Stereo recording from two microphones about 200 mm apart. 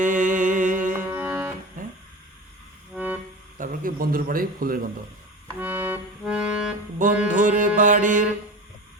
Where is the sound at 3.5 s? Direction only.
45° right (ahead or behind).